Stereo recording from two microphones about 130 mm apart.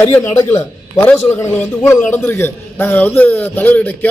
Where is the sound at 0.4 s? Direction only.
20° left (ahead or behind).